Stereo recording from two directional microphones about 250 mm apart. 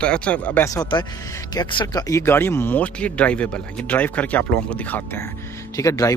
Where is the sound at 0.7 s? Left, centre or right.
Centre.